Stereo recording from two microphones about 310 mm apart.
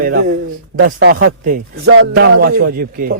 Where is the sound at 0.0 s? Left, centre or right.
Right.